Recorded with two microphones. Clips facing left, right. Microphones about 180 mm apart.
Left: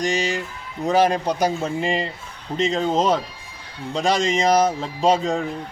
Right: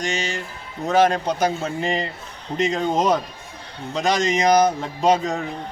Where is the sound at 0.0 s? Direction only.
35° left (ahead or behind).